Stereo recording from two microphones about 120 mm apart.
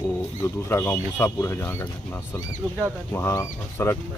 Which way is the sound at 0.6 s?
20° left (ahead or behind).